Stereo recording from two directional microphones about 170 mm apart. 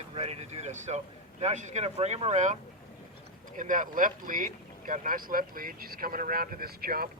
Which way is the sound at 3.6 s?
50° right (ahead or behind).